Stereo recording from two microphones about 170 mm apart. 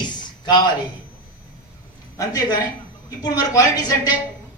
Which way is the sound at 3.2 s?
20° left (ahead or behind).